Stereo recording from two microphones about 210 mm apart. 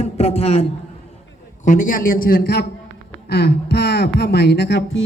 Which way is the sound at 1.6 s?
40° left (ahead or behind).